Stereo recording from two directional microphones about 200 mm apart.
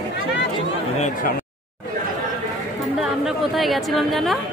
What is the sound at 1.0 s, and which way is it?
Speech, 45° left (ahead or behind).